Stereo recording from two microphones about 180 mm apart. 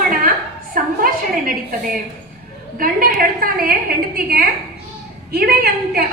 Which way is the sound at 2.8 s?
55° right (ahead or behind).